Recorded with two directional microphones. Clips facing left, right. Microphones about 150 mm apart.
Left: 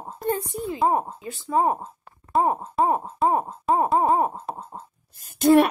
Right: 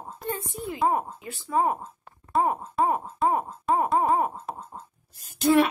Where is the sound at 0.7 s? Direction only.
25° left (ahead or behind).